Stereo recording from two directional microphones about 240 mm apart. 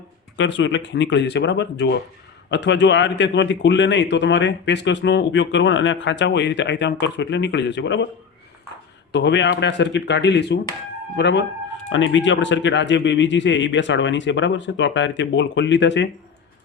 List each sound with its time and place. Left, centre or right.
0.3 s a man's voice: left
9.1 s a man's voice: left